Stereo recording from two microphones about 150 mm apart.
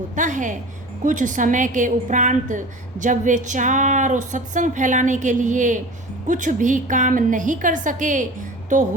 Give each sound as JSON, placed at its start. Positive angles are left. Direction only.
{"t": 0.2, "sound": "speech", "side_deg": -60}